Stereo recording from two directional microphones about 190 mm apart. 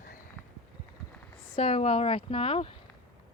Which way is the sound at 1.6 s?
30° left (ahead or behind).